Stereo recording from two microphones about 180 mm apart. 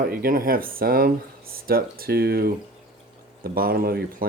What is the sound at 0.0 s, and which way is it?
Speech, 55° right (ahead or behind).